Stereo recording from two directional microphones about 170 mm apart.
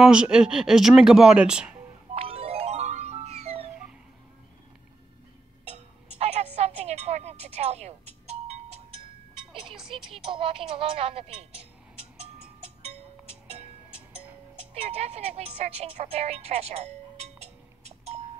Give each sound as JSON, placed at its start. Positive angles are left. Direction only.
{"t": 0.0, "sound": "speech", "side_deg": -5}
{"t": 2.1, "sound": "music", "side_deg": -35}
{"t": 5.7, "sound": "music", "side_deg": -40}
{"t": 9.7, "sound": "music", "side_deg": 0}
{"t": 10.3, "sound": "speech", "side_deg": -30}
{"t": 12.6, "sound": "music", "side_deg": -40}
{"t": 13.9, "sound": "music", "side_deg": -5}
{"t": 14.7, "sound": "speech", "side_deg": -40}